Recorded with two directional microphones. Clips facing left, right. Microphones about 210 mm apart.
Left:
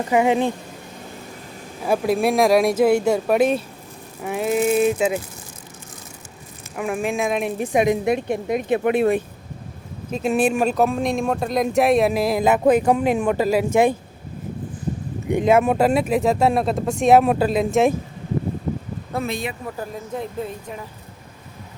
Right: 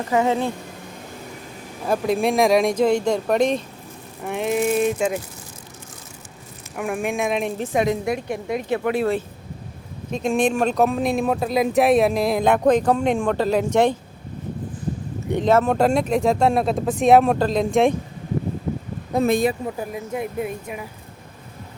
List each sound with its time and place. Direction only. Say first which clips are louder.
0.1 s speech: left 2 dB; 15° left (ahead or behind)
1.9 s speech: left 1 dB; 5° left (ahead or behind)
6.7 s speech: left 1 dB; centre (ahead or behind)
7.6 s a woman's voice: left 5 dB; 15° left (ahead or behind)
10.1 s speech: left 1 dB; 5° left (ahead or behind)
15.3 s speech: left 1 dB; 10° left (ahead or behind)
19.2 s speech: right 10 dB; 45° right (ahead or behind)
19.6 s speech: right 2 dB; 10° right (ahead or behind)